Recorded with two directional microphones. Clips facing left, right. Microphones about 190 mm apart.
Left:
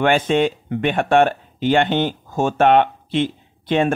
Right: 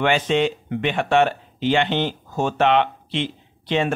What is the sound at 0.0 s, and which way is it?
Speech, 50° left (ahead or behind).